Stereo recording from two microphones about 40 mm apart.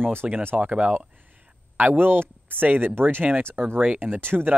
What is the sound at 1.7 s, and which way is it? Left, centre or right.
Speech, right.